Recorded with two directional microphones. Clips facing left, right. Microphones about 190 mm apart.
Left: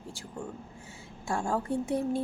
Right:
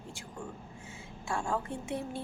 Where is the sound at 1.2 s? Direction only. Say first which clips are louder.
Left 4 dB; 40° left (ahead or behind).